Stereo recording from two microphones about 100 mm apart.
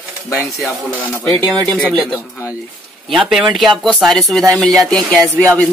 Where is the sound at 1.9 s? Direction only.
5° right (ahead or behind).